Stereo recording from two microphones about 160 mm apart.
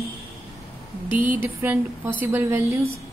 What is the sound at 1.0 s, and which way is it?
A woman's voice, 10° right (ahead or behind).